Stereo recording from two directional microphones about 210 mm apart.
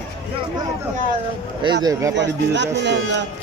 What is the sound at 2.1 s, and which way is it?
Speech, 55° right (ahead or behind).